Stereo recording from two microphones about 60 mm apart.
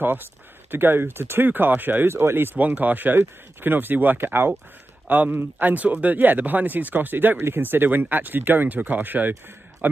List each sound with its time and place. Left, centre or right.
0.0 s speech: right
2.6 s speech: right
5.0 s a man's voice: right